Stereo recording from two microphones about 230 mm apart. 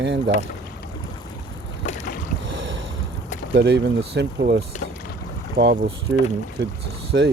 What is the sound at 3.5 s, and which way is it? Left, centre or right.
Speech, right.